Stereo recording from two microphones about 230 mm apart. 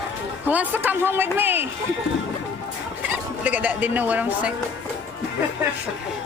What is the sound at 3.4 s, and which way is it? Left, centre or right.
Speech, centre.